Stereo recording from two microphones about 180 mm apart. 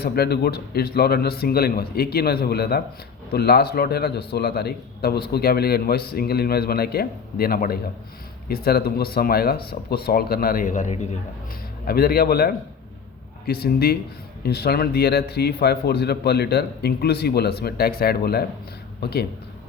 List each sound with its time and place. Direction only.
0.0 s a man's voice: 60° left (ahead or behind); by 11.0 s 40° left (ahead or behind)
11.9 s a man's voice: 55° left (ahead or behind)